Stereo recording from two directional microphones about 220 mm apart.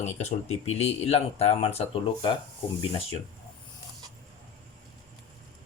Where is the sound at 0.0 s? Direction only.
30° left (ahead or behind).